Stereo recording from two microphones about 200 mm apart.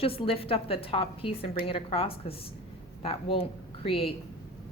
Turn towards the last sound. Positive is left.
turn(degrees=25)  # may be behind; listen again after turning